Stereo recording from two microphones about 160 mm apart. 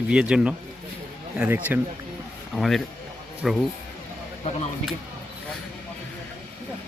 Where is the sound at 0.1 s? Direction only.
5° right (ahead or behind).